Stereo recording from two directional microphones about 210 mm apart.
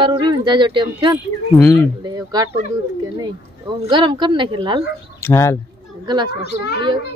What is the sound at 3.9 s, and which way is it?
Speech, 20° right (ahead or behind).